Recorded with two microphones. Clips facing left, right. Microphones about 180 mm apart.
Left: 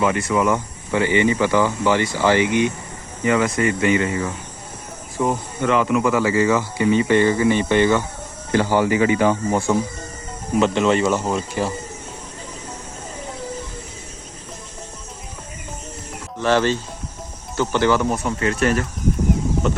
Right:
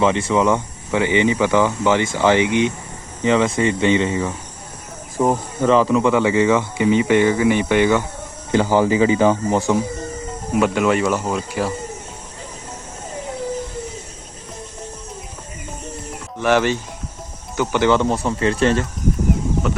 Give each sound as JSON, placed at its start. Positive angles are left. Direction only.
{"t": 0.0, "sound": "speech", "side_deg": -25}
{"t": 16.4, "sound": "speech", "side_deg": -15}